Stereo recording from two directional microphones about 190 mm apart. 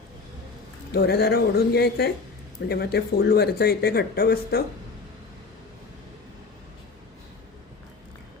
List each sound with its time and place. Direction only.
0.9 s speech: 60° left (ahead or behind)